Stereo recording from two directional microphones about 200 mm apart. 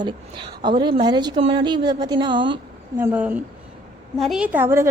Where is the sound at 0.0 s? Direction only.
25° right (ahead or behind).